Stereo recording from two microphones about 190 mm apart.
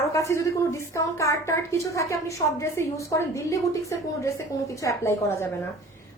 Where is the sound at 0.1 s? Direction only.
15° left (ahead or behind).